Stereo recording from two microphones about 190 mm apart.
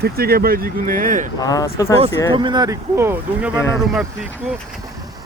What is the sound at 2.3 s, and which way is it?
Speech, 25° right (ahead or behind).